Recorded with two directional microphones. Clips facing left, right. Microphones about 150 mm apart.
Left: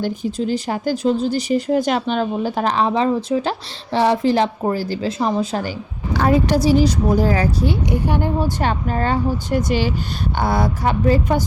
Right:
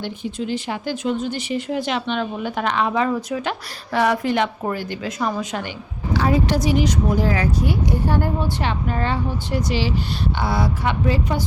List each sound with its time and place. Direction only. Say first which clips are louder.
0.0 s speech: left 5 dB; 40° left (ahead or behind)
6.1 s speech: left 3 dB; 50° left (ahead or behind)
6.6 s speech: left 4 dB; 35° left (ahead or behind)
8.0 s a woman's voice: even; 15° left (ahead or behind)
8.4 s speech: left 3 dB; 40° left (ahead or behind)